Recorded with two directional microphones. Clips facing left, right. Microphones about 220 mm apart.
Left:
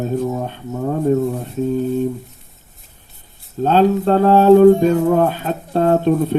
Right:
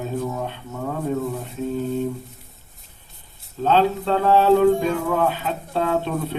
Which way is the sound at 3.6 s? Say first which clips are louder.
Left 5 dB; 45° left (ahead or behind).